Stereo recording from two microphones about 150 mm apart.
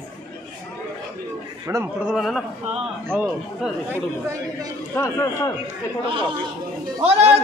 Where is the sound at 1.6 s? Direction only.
20° right (ahead or behind).